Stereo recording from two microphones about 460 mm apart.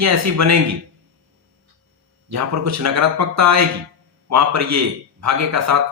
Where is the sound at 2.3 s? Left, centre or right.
Right.